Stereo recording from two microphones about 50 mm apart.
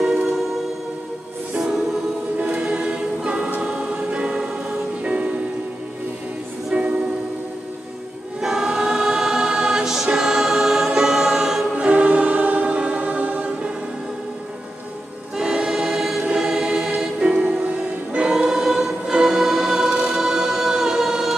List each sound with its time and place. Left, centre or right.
0.0 s music: centre
1.6 s music: centre
2.3 s choir: right
4.1 s music: right
6.7 s music: right
8.4 s choir: centre
11.7 s choir: right
15.3 s choir: centre
19.9 s choir: right
20.2 s a capella: centre